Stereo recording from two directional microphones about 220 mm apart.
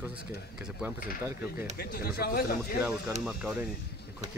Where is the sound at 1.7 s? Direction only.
45° left (ahead or behind).